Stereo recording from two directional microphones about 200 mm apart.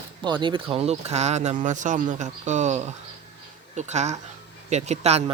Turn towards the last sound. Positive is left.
turn(degrees=-30)  # may be behind; listen again after turning